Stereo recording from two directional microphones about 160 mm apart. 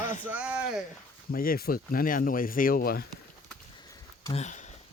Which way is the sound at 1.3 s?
65° left (ahead or behind).